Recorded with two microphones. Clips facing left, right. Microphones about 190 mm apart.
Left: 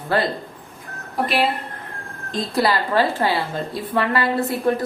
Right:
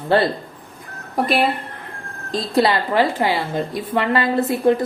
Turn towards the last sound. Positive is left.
turn(degrees=-20)  # may be behind; listen again after turning